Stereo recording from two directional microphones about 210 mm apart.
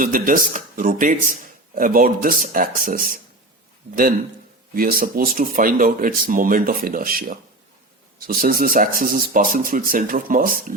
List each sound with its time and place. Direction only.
0.0 s speech: 40° right (ahead or behind)
4.7 s speech: 45° right (ahead or behind)